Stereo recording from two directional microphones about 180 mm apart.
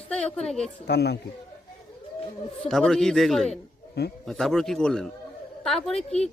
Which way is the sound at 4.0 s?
65° left (ahead or behind).